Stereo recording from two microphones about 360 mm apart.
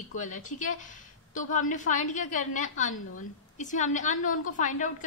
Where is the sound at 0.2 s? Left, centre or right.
Left.